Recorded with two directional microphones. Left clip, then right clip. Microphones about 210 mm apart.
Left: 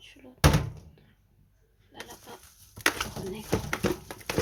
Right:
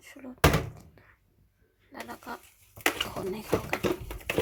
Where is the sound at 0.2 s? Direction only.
15° right (ahead or behind).